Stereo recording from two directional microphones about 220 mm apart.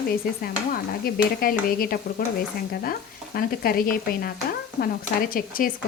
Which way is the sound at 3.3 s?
40° left (ahead or behind).